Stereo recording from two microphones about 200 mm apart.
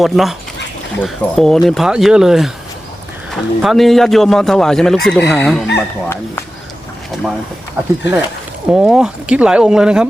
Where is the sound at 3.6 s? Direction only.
Centre (ahead or behind).